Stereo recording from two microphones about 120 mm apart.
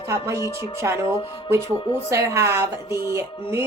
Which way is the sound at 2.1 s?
25° right (ahead or behind).